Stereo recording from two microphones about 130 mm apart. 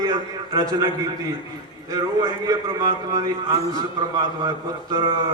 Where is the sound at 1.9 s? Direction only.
35° right (ahead or behind).